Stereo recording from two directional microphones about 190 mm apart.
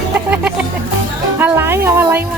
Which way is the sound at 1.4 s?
15° right (ahead or behind).